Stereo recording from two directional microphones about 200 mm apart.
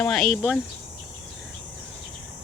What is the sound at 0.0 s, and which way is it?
Speech, centre (ahead or behind).